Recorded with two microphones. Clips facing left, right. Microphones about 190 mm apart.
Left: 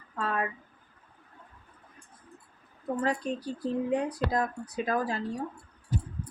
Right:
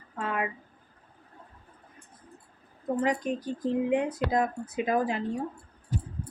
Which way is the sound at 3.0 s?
15° right (ahead or behind).